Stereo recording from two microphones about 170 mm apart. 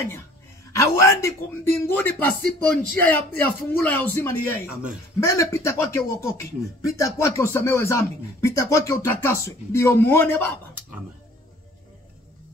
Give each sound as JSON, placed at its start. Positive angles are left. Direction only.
{"t": 0.7, "sound": "speech", "side_deg": 15}